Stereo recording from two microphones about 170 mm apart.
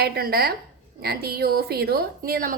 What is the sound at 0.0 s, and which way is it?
A woman's voice, 65° right (ahead or behind).